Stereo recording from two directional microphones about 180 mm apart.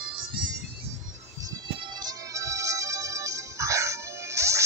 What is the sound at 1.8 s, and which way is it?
Music, 20° right (ahead or behind).